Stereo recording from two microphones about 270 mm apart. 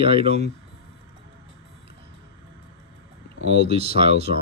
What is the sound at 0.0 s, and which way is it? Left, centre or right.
Speech, right.